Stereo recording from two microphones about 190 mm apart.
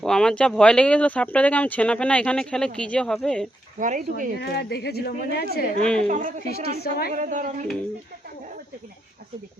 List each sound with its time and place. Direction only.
0.0 s speech: 5° left (ahead or behind)
3.8 s a woman's voice: 45° right (ahead or behind)
4.4 s a woman's voice: 60° left (ahead or behind)
6.0 s a man's voice: 40° right (ahead or behind)
6.5 s a woman's voice: 55° left (ahead or behind)
7.1 s a woman's voice: 40° right (ahead or behind)